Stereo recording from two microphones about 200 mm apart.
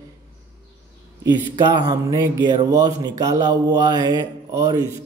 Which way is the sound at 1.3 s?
20° right (ahead or behind).